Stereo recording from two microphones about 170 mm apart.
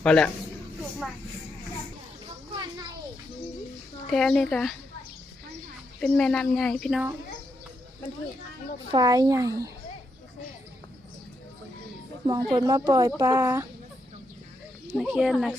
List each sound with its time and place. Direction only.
0.0 s a man's voice: 5° left (ahead or behind)
4.1 s speech: 5° left (ahead or behind)
6.0 s speech: 5° left (ahead or behind)
8.9 s speech: 20° right (ahead or behind)
12.2 s speech: 20° right (ahead or behind)
14.9 s speech: 5° right (ahead or behind)